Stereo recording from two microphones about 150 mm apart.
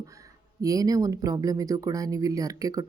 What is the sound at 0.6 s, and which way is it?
A woman's voice, 25° right (ahead or behind).